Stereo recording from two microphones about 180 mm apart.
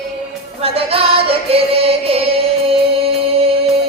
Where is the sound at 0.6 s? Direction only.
30° right (ahead or behind).